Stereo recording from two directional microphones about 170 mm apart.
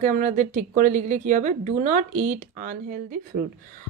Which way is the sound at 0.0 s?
50° right (ahead or behind).